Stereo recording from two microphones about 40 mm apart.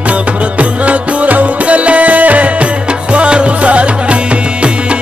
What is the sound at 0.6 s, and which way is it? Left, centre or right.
Music, right.